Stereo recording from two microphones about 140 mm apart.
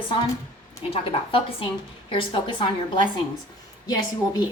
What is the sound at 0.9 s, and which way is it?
A woman's voice, 40° left (ahead or behind).